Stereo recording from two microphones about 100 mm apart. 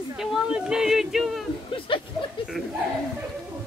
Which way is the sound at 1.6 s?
60° left (ahead or behind).